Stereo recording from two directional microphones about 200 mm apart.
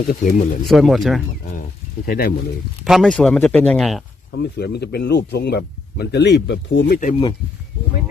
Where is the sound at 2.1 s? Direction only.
45° left (ahead or behind).